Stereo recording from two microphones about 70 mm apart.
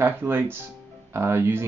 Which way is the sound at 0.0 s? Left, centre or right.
Right.